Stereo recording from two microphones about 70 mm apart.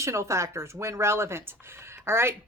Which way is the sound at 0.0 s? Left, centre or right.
Right.